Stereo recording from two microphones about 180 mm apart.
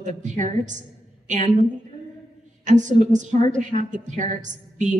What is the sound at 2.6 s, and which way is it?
A woman's voice, 45° right (ahead or behind).